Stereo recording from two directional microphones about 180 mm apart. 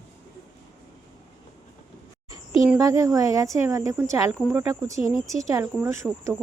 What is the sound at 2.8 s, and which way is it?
Speech, 20° right (ahead or behind).